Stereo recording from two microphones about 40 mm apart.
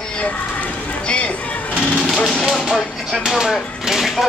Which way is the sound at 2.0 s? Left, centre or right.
Centre.